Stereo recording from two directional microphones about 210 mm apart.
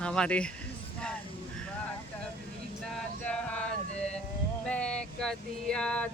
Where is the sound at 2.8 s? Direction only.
5° left (ahead or behind).